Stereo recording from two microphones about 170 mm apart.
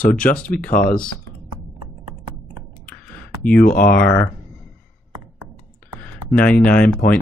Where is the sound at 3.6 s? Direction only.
60° left (ahead or behind).